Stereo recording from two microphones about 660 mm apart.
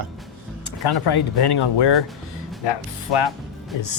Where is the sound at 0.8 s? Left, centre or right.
Left.